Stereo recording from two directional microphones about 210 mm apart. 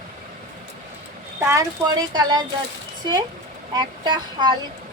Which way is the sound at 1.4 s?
15° right (ahead or behind).